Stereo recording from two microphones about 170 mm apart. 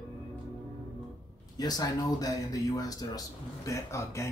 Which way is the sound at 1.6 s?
20° left (ahead or behind).